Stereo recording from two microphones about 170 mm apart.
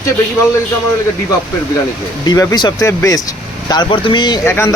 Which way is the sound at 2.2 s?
20° left (ahead or behind).